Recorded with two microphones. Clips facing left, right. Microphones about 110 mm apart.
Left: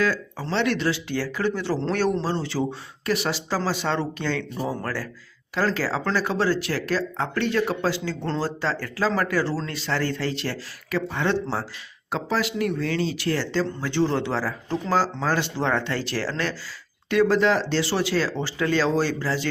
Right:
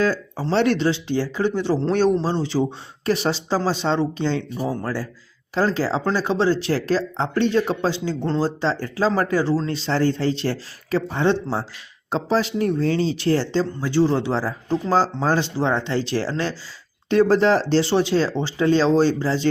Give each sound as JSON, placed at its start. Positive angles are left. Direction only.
{"t": 0.0, "sound": "a sound", "side_deg": -30}
{"t": 0.5, "sound": "speech", "side_deg": -40}
{"t": 0.8, "sound": "speech", "side_deg": -25}
{"t": 3.1, "sound": "speech", "side_deg": -30}
{"t": 4.5, "sound": "speech", "side_deg": -5}
{"t": 5.5, "sound": "speech", "side_deg": -20}
{"t": 13.8, "sound": "speech", "side_deg": -10}
{"t": 17.9, "sound": "speech", "side_deg": -25}